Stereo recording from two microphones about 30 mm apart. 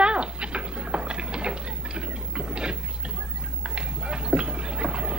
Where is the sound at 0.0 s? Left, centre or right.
Right.